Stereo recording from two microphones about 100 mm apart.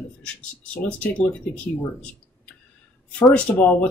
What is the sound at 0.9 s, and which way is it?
Speech, 15° left (ahead or behind).